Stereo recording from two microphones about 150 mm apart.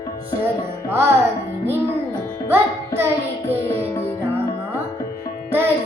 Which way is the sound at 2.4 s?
15° right (ahead or behind).